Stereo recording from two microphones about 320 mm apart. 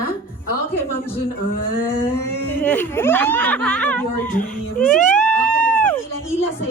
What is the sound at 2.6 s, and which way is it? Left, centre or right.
Speech, centre.